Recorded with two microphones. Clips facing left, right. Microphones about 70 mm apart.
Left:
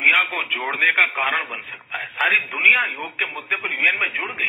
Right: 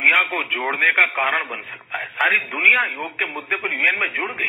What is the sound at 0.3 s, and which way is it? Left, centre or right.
A man's voice, centre.